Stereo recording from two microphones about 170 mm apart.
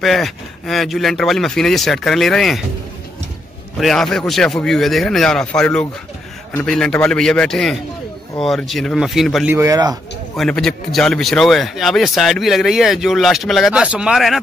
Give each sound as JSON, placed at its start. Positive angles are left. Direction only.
{"t": 0.0, "sound": "speech", "side_deg": 0}
{"t": 3.8, "sound": "speech", "side_deg": 5}
{"t": 9.5, "sound": "speech", "side_deg": -20}
{"t": 10.3, "sound": "speech", "side_deg": 0}